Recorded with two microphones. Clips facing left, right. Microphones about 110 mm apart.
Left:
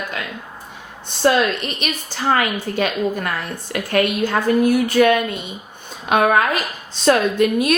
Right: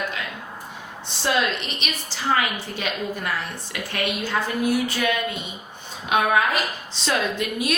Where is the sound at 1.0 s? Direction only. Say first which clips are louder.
Left 7 dB; 50° left (ahead or behind).